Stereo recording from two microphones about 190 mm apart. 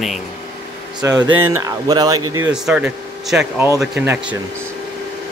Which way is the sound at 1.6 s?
20° right (ahead or behind).